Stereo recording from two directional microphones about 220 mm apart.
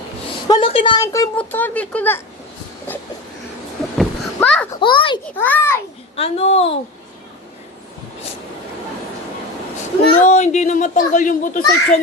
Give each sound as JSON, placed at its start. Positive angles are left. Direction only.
{"t": 0.4, "sound": "a woman's voice", "side_deg": 20}
{"t": 3.9, "sound": "a sound", "side_deg": 5}
{"t": 4.8, "sound": "a woman's voice", "side_deg": 20}
{"t": 5.4, "sound": "a woman's voice", "side_deg": 10}
{"t": 6.1, "sound": "a woman's voice", "side_deg": 25}
{"t": 10.1, "sound": "a child's voice", "side_deg": 30}